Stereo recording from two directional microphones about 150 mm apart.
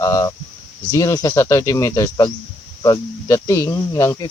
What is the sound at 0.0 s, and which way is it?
Speech, 25° left (ahead or behind).